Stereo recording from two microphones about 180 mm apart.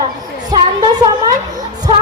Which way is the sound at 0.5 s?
20° right (ahead or behind).